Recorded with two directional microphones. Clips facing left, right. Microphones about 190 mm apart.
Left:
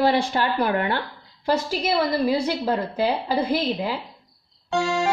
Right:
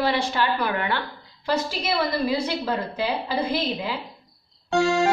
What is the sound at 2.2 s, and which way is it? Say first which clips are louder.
A woman's voice: left 3 dB; 50° left (ahead or behind).